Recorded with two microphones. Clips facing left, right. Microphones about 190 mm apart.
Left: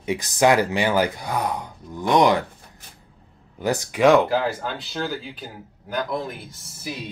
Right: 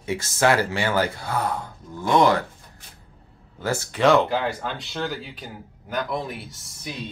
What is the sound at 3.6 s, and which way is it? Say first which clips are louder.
Speech: left 3 dB; 15° left (ahead or behind).